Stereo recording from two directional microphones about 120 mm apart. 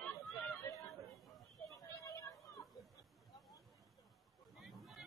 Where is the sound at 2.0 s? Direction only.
25° left (ahead or behind).